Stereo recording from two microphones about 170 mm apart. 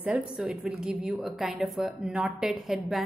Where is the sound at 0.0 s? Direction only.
10° right (ahead or behind).